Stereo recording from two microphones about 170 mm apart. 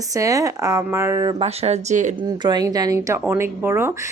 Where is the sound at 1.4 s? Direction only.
35° right (ahead or behind).